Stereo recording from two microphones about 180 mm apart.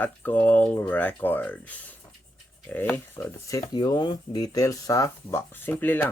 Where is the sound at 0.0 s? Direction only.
10° left (ahead or behind).